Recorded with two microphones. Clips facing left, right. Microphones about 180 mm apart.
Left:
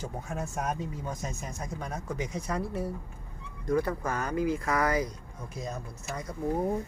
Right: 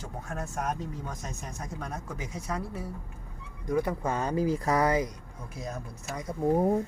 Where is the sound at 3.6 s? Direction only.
20° right (ahead or behind).